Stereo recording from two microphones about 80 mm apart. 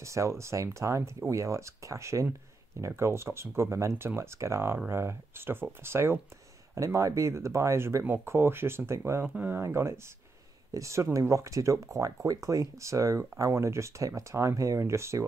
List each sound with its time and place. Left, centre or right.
0.0 s speech: right